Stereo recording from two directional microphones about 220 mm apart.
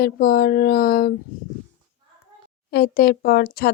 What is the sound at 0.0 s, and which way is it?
Speech, 45° left (ahead or behind).